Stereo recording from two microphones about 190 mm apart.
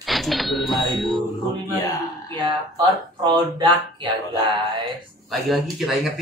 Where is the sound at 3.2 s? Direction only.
25° right (ahead or behind).